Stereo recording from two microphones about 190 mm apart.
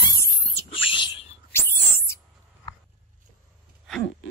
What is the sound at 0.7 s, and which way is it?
Whispering, 25° left (ahead or behind).